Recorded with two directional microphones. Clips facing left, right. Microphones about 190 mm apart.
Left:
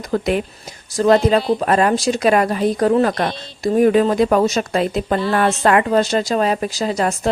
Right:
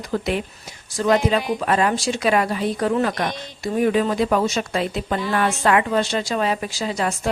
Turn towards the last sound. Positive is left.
turn(degrees=40)  # may be behind; listen again after turning